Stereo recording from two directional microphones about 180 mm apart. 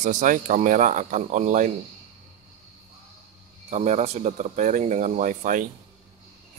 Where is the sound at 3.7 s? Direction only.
40° right (ahead or behind).